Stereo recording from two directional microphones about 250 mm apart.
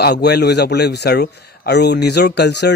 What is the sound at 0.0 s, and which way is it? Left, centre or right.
Speech, left.